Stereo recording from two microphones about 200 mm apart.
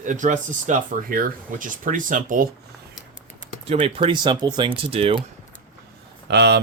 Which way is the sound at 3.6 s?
30° right (ahead or behind).